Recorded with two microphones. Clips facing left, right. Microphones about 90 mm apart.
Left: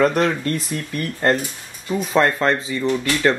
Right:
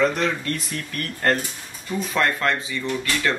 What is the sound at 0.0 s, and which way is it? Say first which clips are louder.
Speech: left 4 dB; 45° left (ahead or behind).